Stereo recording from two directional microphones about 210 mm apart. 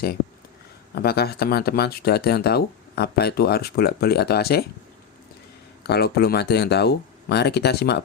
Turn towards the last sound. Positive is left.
turn(degrees=50)  # may be behind; listen again after turning